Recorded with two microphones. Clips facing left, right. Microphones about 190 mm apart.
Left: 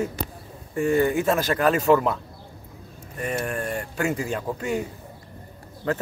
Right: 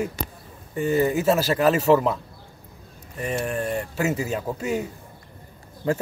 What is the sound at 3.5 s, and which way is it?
Speech, 25° right (ahead or behind).